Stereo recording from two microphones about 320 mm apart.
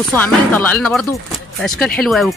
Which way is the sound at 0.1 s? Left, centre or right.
Centre.